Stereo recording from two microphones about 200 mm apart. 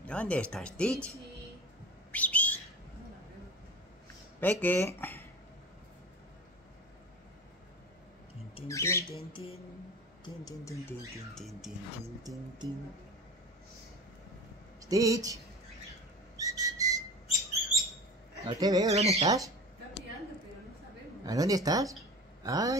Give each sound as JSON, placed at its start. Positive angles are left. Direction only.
{"t": 0.0, "sound": "speech", "side_deg": 5}
{"t": 2.1, "sound": "bird", "side_deg": 5}
{"t": 4.4, "sound": "speech", "side_deg": 10}
{"t": 8.6, "sound": "speech", "side_deg": 15}
{"t": 9.2, "sound": "a sound", "side_deg": 25}
{"t": 10.2, "sound": "speech", "side_deg": 15}
{"t": 12.2, "sound": "speech", "side_deg": -20}
{"t": 14.9, "sound": "speech", "side_deg": -15}
{"t": 16.3, "sound": "whistle", "side_deg": -15}
{"t": 18.4, "sound": "speech", "side_deg": -20}
{"t": 18.9, "sound": "speech", "side_deg": -30}
{"t": 19.2, "sound": "speech", "side_deg": -15}
{"t": 21.3, "sound": "speech", "side_deg": -15}